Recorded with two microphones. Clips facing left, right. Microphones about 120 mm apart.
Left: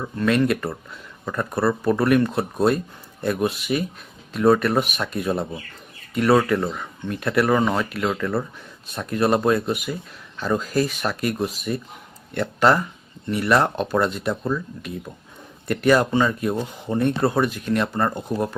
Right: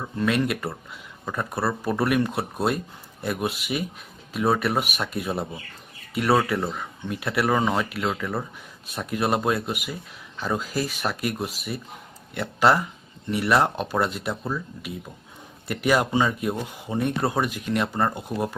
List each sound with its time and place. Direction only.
0.2 s speech: 10° right (ahead or behind)